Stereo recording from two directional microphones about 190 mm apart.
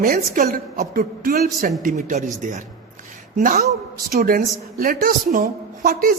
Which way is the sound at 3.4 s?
45° right (ahead or behind).